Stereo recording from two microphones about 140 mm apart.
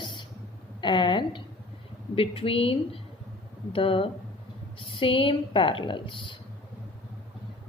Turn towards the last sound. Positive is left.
turn(degrees=35)  # may be behind; listen again after turning